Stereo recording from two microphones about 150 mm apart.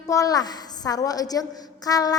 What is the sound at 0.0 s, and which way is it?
A woman's voice, 20° left (ahead or behind).